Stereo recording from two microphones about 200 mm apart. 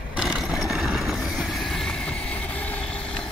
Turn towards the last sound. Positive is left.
turn(degrees=5)  # may be behind; listen again after turning